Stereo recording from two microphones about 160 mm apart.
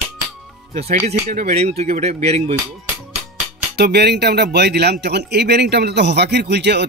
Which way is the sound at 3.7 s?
90° right.